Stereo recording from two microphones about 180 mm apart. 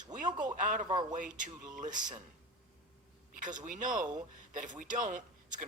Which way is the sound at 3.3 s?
45° right (ahead or behind).